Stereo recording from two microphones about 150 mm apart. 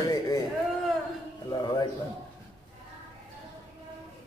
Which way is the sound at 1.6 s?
25° left (ahead or behind).